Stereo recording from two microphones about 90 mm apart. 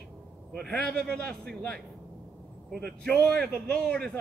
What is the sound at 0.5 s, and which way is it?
A man's voice, 10° left (ahead or behind).